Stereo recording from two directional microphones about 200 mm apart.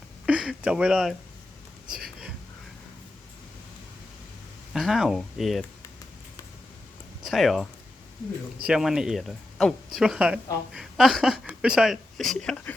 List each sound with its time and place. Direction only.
0.3 s speech: 5° right (ahead or behind)
4.7 s speech: centre (ahead or behind)
7.3 s speech: centre (ahead or behind)